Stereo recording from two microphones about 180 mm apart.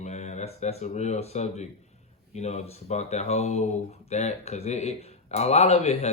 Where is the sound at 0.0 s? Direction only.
40° left (ahead or behind).